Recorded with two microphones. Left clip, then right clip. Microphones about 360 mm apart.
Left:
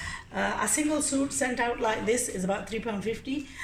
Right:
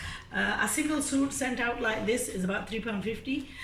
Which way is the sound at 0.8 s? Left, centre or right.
Centre.